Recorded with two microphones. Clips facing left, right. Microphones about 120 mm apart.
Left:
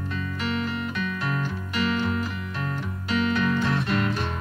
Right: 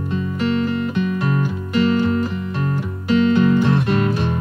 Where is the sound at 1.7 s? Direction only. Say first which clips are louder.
Right 9 dB; 40° right (ahead or behind).